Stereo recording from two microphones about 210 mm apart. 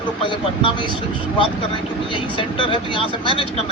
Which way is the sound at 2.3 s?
25° left (ahead or behind).